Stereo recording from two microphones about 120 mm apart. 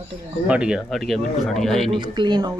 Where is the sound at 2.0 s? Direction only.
40° right (ahead or behind).